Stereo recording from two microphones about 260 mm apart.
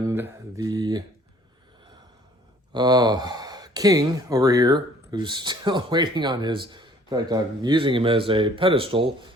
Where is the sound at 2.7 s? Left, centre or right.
Centre.